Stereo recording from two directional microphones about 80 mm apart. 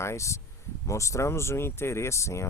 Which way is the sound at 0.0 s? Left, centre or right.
Left.